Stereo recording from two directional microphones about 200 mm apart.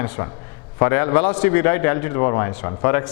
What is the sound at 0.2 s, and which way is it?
A man's voice, 20° left (ahead or behind).